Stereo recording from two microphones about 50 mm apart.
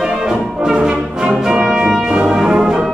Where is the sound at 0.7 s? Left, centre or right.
Centre.